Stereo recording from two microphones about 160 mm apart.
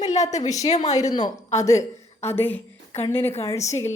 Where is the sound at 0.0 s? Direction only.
45° left (ahead or behind).